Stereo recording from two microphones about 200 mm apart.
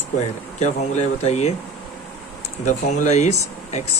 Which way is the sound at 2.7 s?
35° left (ahead or behind).